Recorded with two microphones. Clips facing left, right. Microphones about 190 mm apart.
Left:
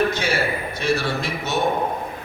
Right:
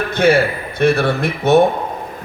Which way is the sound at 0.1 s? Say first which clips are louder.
Right 9 dB; 55° right (ahead or behind).